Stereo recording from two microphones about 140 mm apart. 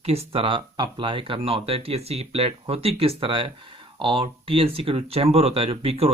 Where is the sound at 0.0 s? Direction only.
45° right (ahead or behind).